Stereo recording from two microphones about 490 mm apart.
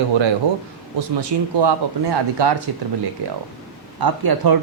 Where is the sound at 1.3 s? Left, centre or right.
Right.